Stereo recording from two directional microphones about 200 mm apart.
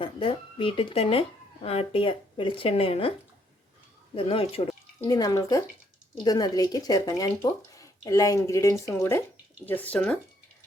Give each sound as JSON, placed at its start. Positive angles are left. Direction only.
{"t": 0.0, "sound": "speech", "side_deg": 25}
{"t": 4.1, "sound": "speech", "side_deg": 25}